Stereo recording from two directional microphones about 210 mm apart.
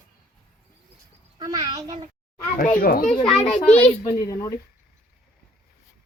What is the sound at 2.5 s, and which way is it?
A child's voice, 40° left (ahead or behind).